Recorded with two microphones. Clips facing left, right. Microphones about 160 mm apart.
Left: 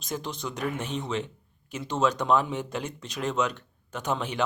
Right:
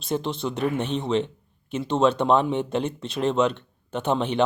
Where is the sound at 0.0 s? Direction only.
25° right (ahead or behind).